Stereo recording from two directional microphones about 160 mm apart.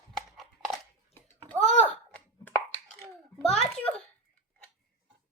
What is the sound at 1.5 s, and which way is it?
Typing, 5° left (ahead or behind).